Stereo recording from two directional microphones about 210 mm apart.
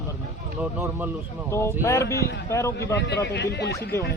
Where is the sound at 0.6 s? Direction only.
10° right (ahead or behind).